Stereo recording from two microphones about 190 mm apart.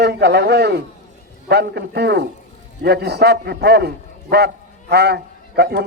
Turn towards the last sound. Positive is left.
turn(degrees=-60)  # may be behind; listen again after turning